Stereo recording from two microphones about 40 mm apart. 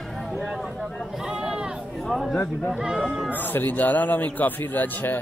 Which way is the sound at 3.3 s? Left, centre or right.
Left.